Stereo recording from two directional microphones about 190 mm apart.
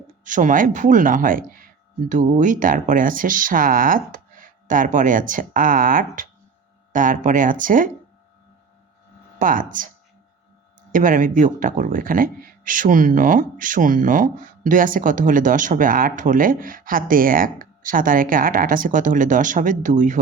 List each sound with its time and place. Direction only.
0.3 s speech: 45° right (ahead or behind)
9.4 s speech: 45° right (ahead or behind)
10.9 s speech: 45° right (ahead or behind)